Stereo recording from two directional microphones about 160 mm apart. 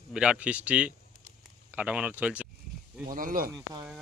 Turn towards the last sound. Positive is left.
turn(degrees=-60)  # may be behind; listen again after turning